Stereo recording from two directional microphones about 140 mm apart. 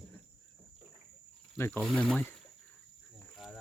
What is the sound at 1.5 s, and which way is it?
Pour, 15° left (ahead or behind).